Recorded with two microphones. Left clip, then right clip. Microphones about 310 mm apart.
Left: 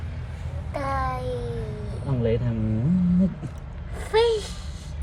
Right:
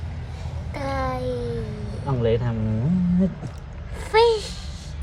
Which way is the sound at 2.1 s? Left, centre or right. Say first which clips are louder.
Right 3 dB; centre.